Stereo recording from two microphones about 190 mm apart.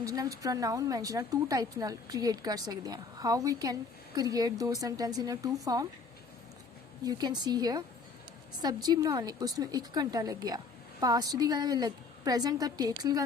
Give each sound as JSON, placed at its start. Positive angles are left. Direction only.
{"t": 0.0, "sound": "a woman's voice", "side_deg": -20}
{"t": 7.0, "sound": "a woman's voice", "side_deg": -20}